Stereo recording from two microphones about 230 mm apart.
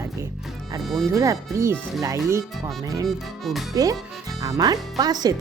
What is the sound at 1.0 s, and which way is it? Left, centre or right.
Speech, centre.